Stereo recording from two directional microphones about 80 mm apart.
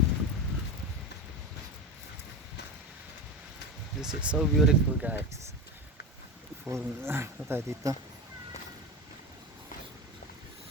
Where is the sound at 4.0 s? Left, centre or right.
Centre.